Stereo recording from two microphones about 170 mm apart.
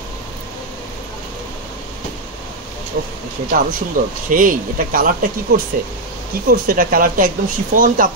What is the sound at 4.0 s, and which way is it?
Speech, 50° right (ahead or behind).